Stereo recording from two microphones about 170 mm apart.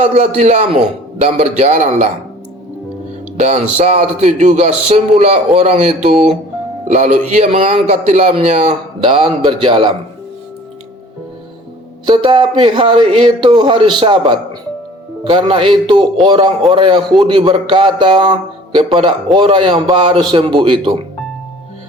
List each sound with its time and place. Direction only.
0.0 s a man's voice: 45° right (ahead or behind)
3.3 s a man's voice: 45° right (ahead or behind)
9.0 s a man's voice: 30° right (ahead or behind)
12.0 s a man's voice: 30° right (ahead or behind)